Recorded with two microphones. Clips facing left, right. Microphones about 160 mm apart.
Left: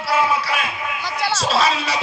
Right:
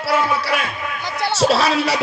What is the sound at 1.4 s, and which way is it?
Speech, 65° right (ahead or behind).